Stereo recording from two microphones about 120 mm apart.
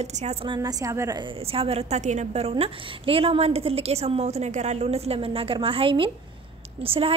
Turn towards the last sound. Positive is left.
turn(degrees=-50)  # may be behind; listen again after turning